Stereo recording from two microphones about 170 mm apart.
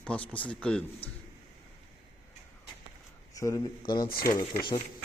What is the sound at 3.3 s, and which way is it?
Speech, 20° left (ahead or behind).